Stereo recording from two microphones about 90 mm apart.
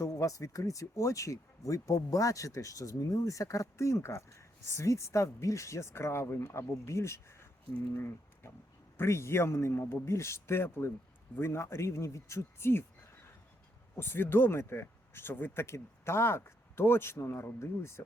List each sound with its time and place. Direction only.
0.0 s speech: 40° left (ahead or behind)
13.9 s speech: 25° left (ahead or behind)